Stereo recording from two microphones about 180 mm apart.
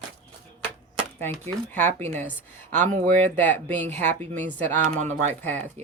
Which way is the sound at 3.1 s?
45° right (ahead or behind).